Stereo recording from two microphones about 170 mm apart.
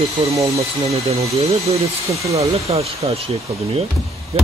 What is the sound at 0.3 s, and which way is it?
Speech, 20° right (ahead or behind).